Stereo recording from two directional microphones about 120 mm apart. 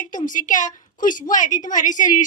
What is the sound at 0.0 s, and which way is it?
A woman's voice, 90° left.